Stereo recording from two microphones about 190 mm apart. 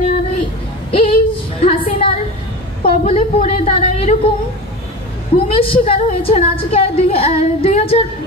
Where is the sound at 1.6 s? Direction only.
30° left (ahead or behind).